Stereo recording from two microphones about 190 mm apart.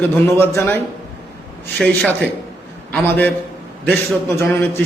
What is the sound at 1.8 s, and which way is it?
A man's voice, 5° left (ahead or behind).